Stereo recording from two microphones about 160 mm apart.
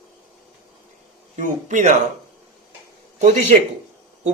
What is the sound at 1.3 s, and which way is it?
Speech, 50° right (ahead or behind).